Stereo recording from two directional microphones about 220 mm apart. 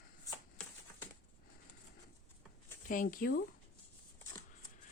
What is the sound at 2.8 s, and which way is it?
Speech, 40° left (ahead or behind).